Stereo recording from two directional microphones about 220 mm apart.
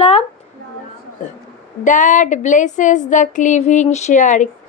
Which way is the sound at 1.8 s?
35° left (ahead or behind).